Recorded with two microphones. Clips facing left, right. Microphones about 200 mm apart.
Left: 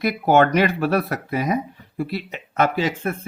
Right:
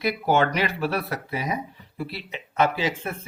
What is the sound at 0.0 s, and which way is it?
Speech, 50° left (ahead or behind).